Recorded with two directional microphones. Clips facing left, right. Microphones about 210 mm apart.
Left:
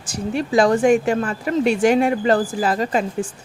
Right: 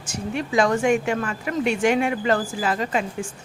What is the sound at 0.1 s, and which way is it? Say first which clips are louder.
A woman's voice: left 5 dB; 35° left (ahead or behind).